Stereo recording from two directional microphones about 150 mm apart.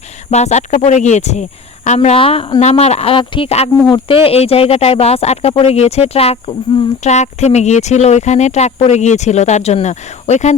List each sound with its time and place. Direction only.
0.3 s speech: 50° left (ahead or behind)